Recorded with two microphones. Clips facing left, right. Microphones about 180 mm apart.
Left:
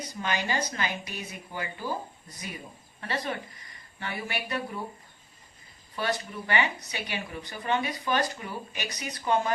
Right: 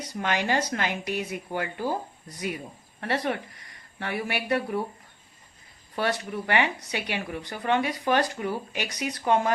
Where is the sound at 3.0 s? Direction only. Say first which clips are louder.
Right 5 dB; 70° right (ahead or behind).